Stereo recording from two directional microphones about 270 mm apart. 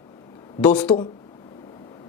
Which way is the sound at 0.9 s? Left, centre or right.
Centre.